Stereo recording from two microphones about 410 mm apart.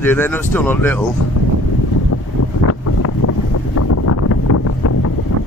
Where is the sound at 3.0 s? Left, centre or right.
Left.